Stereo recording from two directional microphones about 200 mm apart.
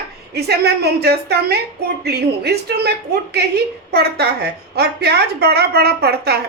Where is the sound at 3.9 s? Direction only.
55° right (ahead or behind).